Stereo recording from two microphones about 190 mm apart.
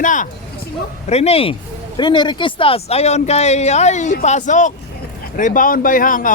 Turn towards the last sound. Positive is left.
turn(degrees=45)  # may be behind; listen again after turning